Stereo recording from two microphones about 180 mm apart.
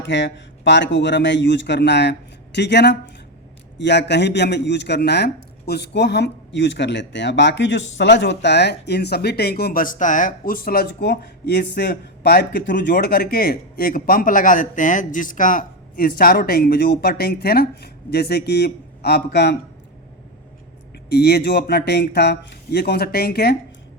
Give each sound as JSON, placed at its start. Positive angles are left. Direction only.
{"t": 0.1, "sound": "a man's voice", "side_deg": 80}
{"t": 21.1, "sound": "a man's voice", "side_deg": 60}